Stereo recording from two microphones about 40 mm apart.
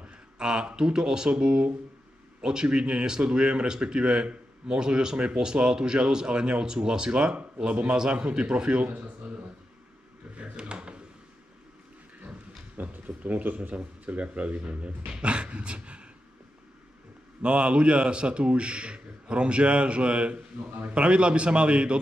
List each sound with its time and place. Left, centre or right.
0.0 s speech: right
8.8 s speech: right
10.3 s a sound: right
12.7 s speech: right
17.4 s speech: right